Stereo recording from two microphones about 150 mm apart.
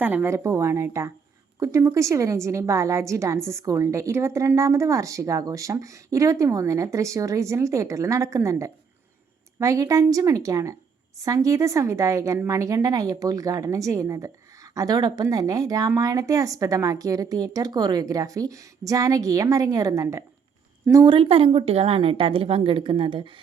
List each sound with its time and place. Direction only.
0.0 s a woman's voice: 10° right (ahead or behind); by 23.3 s 35° right (ahead or behind)